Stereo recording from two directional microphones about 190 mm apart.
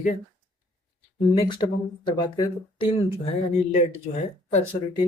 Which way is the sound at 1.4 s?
25° left (ahead or behind).